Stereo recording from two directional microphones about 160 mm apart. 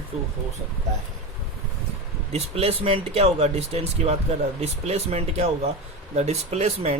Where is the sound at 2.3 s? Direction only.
40° right (ahead or behind).